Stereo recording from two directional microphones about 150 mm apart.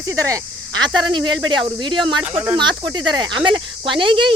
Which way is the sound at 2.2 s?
10° right (ahead or behind).